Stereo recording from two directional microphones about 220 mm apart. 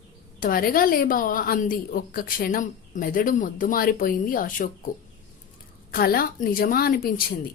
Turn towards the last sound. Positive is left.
turn(degrees=40)  # may be behind; listen again after turning